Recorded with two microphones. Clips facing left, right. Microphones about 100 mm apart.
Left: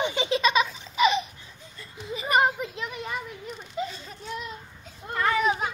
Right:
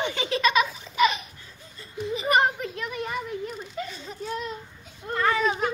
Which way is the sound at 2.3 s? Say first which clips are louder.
Left 1 dB; 10° left (ahead or behind).